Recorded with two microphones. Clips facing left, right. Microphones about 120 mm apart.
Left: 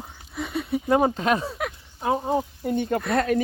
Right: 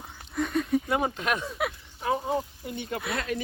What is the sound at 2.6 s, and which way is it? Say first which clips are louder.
Speech: left 9 dB; 45° left (ahead or behind).